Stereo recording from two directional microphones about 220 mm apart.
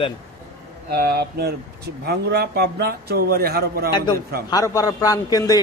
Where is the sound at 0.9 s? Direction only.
45° right (ahead or behind).